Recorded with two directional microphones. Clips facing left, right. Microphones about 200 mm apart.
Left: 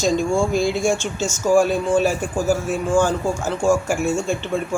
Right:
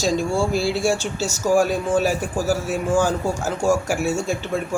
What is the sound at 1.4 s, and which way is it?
Speech, 5° right (ahead or behind).